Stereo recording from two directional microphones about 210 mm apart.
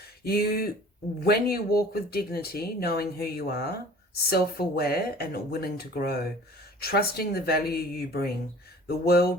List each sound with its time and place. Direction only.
0.3 s speech: 45° left (ahead or behind)